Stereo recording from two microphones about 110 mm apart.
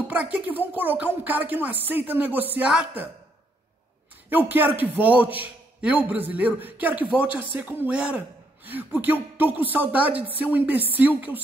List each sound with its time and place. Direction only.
0.1 s a man's voice: 15° right (ahead or behind)
4.3 s a man's voice: 15° right (ahead or behind)